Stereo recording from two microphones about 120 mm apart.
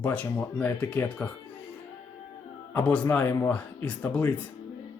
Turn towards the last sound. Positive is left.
turn(degrees=15)  # may be behind; listen again after turning